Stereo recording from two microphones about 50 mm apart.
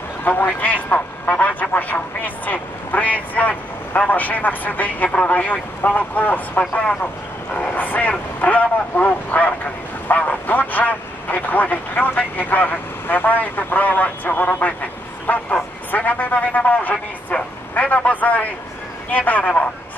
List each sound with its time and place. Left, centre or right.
0.2 s a man's voice: left
17.3 s vehicle: left
17.7 s speech: left